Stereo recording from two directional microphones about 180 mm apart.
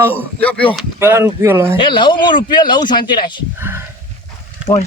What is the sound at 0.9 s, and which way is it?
Speech, 15° right (ahead or behind).